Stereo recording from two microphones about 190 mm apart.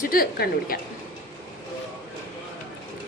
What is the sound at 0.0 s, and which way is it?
Speech, 50° left (ahead or behind).